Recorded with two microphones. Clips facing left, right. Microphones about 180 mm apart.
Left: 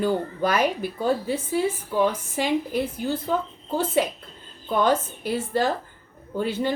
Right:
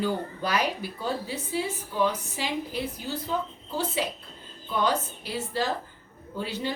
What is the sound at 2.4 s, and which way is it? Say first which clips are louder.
Speech: left 8 dB; 50° left (ahead or behind).